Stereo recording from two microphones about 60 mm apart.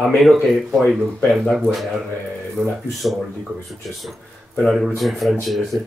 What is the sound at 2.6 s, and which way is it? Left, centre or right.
Speech, right.